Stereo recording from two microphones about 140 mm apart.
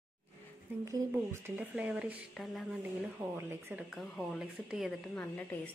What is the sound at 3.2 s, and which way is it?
Speech, 15° right (ahead or behind).